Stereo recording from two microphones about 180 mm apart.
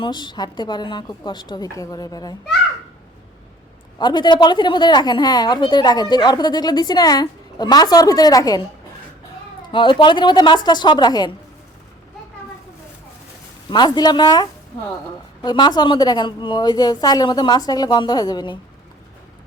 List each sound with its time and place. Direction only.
0.0 s a woman's voice: 25° left (ahead or behind)
3.9 s a woman's voice: 25° left (ahead or behind)
9.7 s a woman's voice: 25° left (ahead or behind)
13.7 s a woman's voice: 25° left (ahead or behind)